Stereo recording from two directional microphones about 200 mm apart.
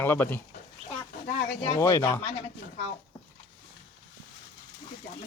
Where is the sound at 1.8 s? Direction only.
15° left (ahead or behind).